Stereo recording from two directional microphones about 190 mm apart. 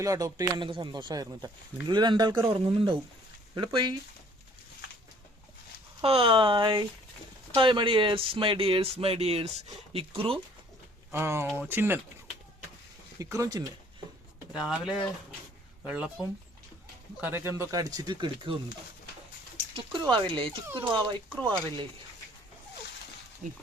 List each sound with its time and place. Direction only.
0.0 s speech: 20° right (ahead or behind)
6.0 s speech: 30° right (ahead or behind)
11.1 s speech: 10° right (ahead or behind)
13.1 s speech: 15° right (ahead or behind)
14.5 s speech: 5° right (ahead or behind); by 18.6 s 25° right (ahead or behind)
19.7 s speech: 25° right (ahead or behind)
20.7 s speech: 10° right (ahead or behind)
20.9 s speech: 25° right (ahead or behind)